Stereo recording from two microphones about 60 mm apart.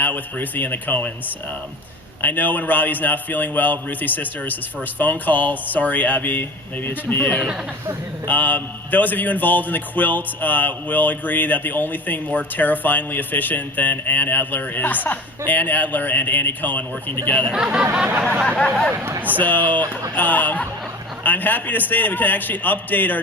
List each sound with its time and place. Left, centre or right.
0.0 s speech: left
2.2 s speech: left
17.6 s speech: right
19.4 s a man's voice: left